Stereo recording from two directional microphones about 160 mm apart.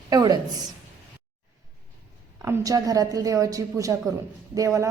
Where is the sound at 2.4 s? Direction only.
20° right (ahead or behind).